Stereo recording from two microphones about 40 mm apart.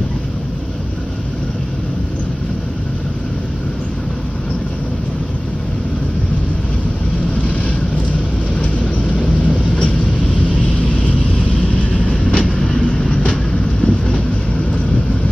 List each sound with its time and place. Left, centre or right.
12.3 s train: left
12.5 s train: centre